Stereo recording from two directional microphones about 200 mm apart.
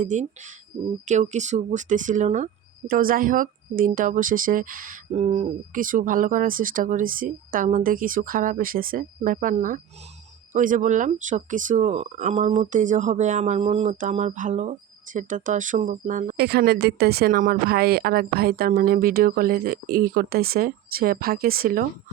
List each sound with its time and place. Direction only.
0.0 s speech: 40° right (ahead or behind)